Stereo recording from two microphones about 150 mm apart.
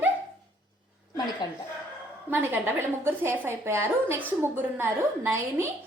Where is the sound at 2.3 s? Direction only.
15° right (ahead or behind).